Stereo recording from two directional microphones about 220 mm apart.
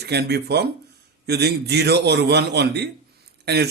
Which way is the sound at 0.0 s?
50° right (ahead or behind).